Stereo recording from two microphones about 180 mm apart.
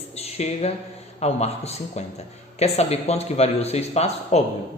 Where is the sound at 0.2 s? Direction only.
35° left (ahead or behind).